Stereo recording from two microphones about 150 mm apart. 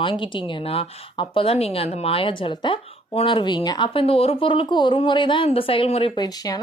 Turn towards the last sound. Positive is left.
turn(degrees=25)  # may be behind; listen again after turning